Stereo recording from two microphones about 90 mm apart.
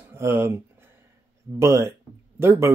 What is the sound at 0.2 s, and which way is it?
Speech, 30° right (ahead or behind).